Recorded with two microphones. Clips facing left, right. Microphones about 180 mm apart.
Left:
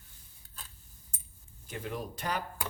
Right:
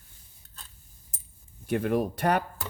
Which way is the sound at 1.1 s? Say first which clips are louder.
Left 1 dB; 30° right (ahead or behind).